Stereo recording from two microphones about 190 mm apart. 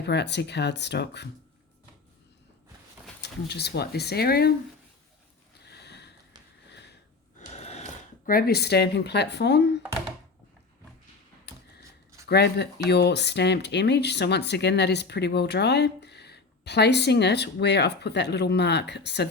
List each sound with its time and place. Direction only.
0.0 s speech: 65° left (ahead or behind)
3.2 s speech: 60° left (ahead or behind)
5.7 s sniff: 60° left (ahead or behind)
7.3 s a sound: 35° left (ahead or behind)
8.3 s speech: 55° left (ahead or behind)
12.2 s speech: 60° left (ahead or behind)